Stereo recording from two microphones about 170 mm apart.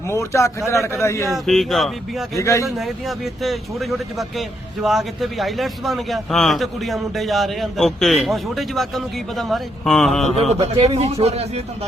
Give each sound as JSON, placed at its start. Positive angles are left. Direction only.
{"t": 0.1, "sound": "a man's voice", "side_deg": 15}
{"t": 1.5, "sound": "a man's voice", "side_deg": 0}
{"t": 2.4, "sound": "a man's voice", "side_deg": 15}
{"t": 2.6, "sound": "a man's voice", "side_deg": 0}
{"t": 10.5, "sound": "speech", "side_deg": -35}